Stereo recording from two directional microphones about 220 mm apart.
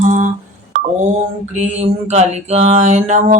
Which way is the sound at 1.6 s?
30° right (ahead or behind).